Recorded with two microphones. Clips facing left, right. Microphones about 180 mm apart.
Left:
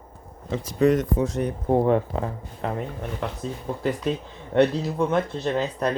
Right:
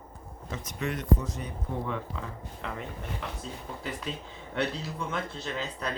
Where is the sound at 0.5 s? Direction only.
30° left (ahead or behind).